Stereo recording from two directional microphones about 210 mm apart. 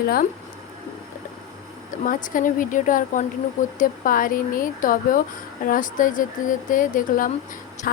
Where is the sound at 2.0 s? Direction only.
40° left (ahead or behind).